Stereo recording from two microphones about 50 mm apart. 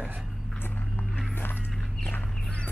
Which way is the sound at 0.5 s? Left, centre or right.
Left.